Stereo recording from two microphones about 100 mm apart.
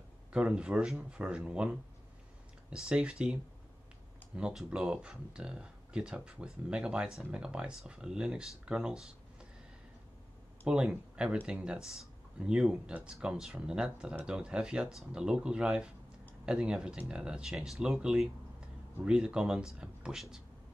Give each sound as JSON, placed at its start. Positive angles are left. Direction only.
{"t": 0.3, "sound": "speech", "side_deg": -10}
{"t": 4.4, "sound": "speech", "side_deg": -10}
{"t": 10.7, "sound": "speech", "side_deg": -10}